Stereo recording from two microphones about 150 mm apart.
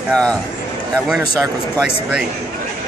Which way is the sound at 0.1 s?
5° left (ahead or behind).